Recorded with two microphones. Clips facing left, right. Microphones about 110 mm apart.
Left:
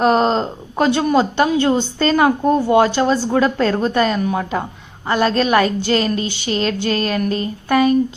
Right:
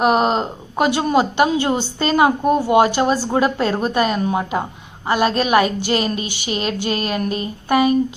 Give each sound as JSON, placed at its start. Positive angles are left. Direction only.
{"t": 0.0, "sound": "a woman's voice", "side_deg": -10}